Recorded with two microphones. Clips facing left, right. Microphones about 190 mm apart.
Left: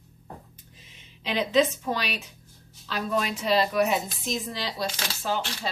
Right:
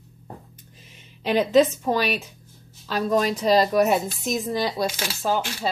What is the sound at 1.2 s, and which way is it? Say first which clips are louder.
A woman's voice: right 5 dB; 45° right (ahead or behind).